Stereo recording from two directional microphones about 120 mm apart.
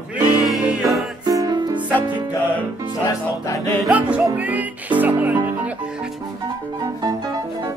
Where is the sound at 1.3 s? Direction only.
30° right (ahead or behind).